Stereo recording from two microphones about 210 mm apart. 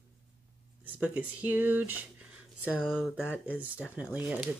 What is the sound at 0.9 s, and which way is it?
Speech, 5° right (ahead or behind).